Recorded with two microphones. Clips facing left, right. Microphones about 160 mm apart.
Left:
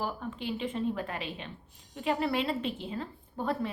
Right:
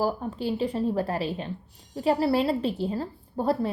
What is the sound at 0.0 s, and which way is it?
Speech, 35° right (ahead or behind).